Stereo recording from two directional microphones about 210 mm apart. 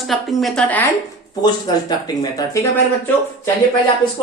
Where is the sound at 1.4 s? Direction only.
20° left (ahead or behind).